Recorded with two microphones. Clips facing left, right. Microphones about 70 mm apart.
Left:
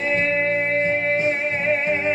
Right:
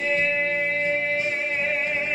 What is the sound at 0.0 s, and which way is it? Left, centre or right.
Music, left.